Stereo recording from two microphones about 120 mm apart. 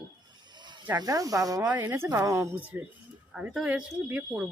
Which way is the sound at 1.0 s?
30° right (ahead or behind).